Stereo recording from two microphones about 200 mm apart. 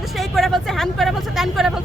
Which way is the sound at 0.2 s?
Centre (ahead or behind).